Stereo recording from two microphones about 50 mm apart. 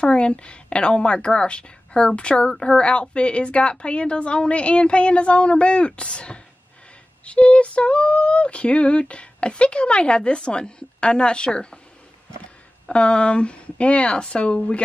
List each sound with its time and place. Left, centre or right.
0.0 s a woman's voice: left
12.9 s a woman's voice: left